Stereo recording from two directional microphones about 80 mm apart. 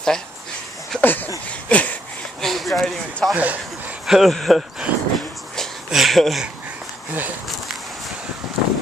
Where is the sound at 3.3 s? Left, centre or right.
Centre.